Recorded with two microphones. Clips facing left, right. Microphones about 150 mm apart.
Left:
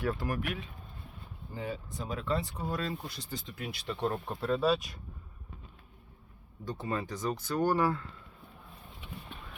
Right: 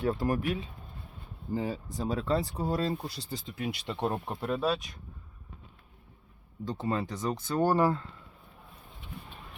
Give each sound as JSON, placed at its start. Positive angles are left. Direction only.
{"t": 0.0, "sound": "speech", "side_deg": -25}
{"t": 4.7, "sound": "speech", "side_deg": 0}
{"t": 6.7, "sound": "speech", "side_deg": -20}